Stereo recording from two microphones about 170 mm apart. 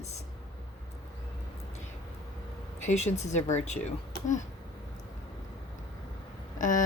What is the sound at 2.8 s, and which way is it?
Speech, 40° left (ahead or behind).